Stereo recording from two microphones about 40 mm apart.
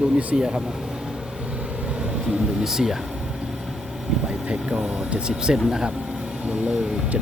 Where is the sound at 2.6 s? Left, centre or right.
Centre.